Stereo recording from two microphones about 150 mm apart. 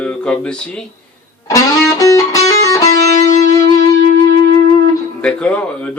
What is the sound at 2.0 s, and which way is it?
Music, 20° left (ahead or behind).